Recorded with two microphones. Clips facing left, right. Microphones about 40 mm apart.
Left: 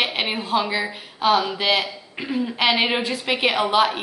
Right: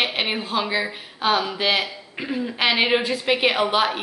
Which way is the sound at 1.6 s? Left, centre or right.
Right.